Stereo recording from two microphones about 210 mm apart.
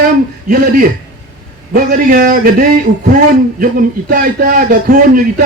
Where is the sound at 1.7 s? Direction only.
40° right (ahead or behind).